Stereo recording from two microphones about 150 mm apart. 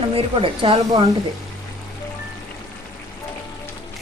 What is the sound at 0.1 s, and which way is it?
Speech, 40° right (ahead or behind).